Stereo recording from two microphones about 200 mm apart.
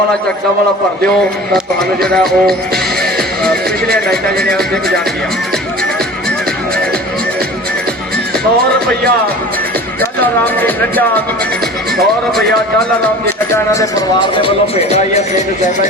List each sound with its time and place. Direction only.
2.0 s speech: 5° left (ahead or behind)
10.0 s speech: 10° left (ahead or behind)
14.4 s a man's voice: 30° left (ahead or behind)